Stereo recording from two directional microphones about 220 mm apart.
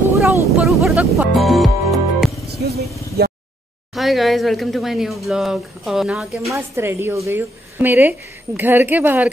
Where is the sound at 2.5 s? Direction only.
45° right (ahead or behind).